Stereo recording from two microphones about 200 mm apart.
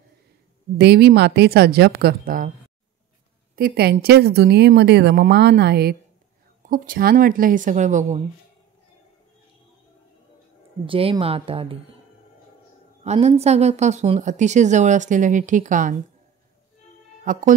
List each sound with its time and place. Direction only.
0.7 s speech: 55° right (ahead or behind)
3.5 s speech: 50° right (ahead or behind)
10.9 s a woman's voice: 30° right (ahead or behind)
13.0 s speech: 35° right (ahead or behind)
17.2 s speech: 40° right (ahead or behind)